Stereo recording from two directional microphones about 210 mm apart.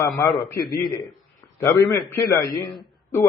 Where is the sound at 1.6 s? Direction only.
10° left (ahead or behind).